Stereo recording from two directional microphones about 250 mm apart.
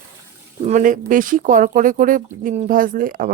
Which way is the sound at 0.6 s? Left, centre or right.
Right.